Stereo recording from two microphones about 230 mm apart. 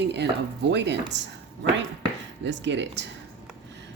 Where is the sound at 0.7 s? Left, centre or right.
Right.